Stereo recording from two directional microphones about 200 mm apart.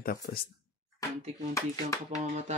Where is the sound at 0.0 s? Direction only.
45° left (ahead or behind).